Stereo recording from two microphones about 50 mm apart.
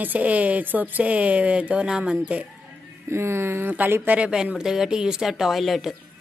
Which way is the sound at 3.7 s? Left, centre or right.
Right.